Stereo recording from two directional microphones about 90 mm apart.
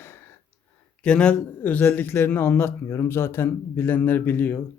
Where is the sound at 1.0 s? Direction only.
10° left (ahead or behind).